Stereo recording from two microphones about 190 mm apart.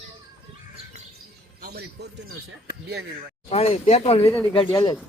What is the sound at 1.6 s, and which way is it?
Speech, 55° right (ahead or behind).